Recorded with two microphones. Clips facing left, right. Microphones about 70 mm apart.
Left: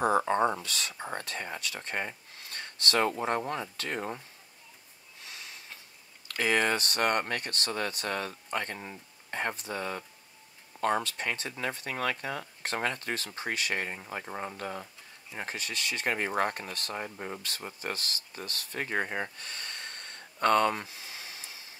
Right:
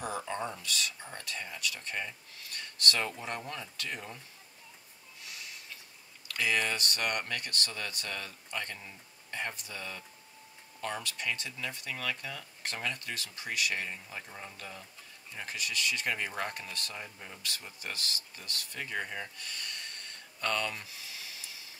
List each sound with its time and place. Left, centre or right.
0.0 s speech: left
6.4 s speech: left